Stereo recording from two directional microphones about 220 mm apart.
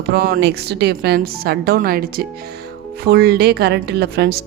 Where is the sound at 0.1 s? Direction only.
45° right (ahead or behind).